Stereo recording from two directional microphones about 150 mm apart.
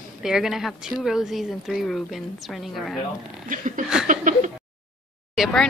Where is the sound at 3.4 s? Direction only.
60° right (ahead or behind).